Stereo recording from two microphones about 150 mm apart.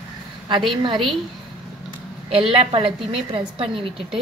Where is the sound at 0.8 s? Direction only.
35° right (ahead or behind).